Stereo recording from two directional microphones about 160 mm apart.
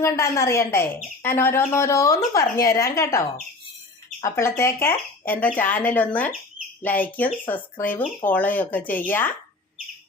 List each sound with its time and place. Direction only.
0.0 s speech: 15° left (ahead or behind)